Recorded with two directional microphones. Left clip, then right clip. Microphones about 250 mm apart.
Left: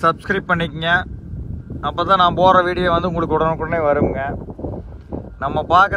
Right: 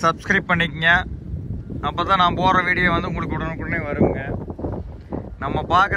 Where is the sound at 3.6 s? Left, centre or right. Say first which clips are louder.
Left 5 dB; centre.